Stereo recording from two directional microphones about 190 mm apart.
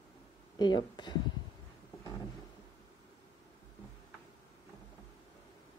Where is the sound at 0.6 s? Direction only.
25° left (ahead or behind).